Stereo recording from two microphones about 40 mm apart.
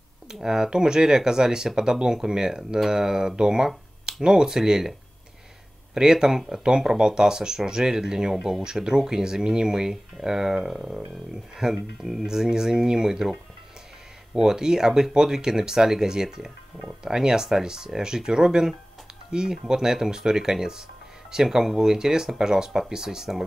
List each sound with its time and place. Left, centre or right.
0.3 s speech: centre
5.9 s speech: centre
14.3 s speech: centre